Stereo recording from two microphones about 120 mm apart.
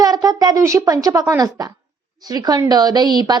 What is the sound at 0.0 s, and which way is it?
A woman's voice, 30° right (ahead or behind).